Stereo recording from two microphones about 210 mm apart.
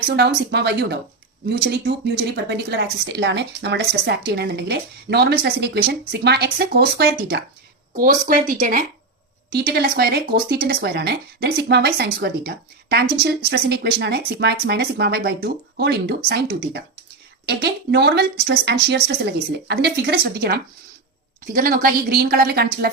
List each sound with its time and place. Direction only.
0.0 s speech: 50° right (ahead or behind)
7.9 s speech: 40° right (ahead or behind)